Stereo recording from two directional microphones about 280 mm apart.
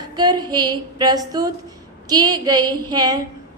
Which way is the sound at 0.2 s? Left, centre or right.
Centre.